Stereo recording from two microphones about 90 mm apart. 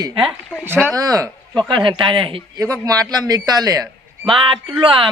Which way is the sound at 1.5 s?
65° right (ahead or behind).